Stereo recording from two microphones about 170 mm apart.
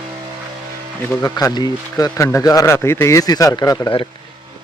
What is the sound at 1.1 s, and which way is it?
Speech, 15° left (ahead or behind).